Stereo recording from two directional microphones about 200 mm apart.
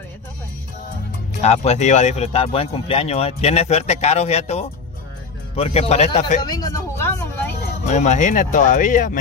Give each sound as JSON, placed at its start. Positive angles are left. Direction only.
{"t": 1.4, "sound": "speech", "side_deg": 35}
{"t": 6.4, "sound": "vehicle", "side_deg": 20}
{"t": 7.9, "sound": "speech", "side_deg": 35}